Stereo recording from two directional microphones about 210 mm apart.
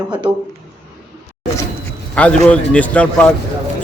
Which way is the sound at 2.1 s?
5° left (ahead or behind).